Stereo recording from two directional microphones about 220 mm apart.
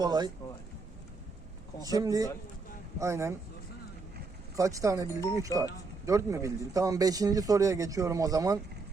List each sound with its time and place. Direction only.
0.0 s a man's voice: 20° right (ahead or behind)
1.9 s a man's voice: 15° right (ahead or behind)
4.5 s a man's voice: 15° right (ahead or behind)
5.5 s speech: 15° left (ahead or behind)
6.1 s a man's voice: 15° right (ahead or behind)